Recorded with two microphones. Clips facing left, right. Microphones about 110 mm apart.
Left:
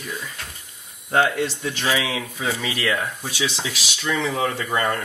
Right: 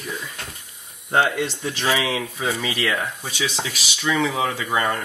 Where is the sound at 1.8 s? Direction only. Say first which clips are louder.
Right 2 dB; 30° right (ahead or behind).